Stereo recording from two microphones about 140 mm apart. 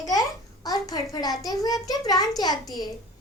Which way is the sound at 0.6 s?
25° left (ahead or behind).